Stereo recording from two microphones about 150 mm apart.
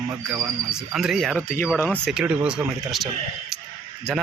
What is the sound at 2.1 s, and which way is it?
Speech, 10° right (ahead or behind).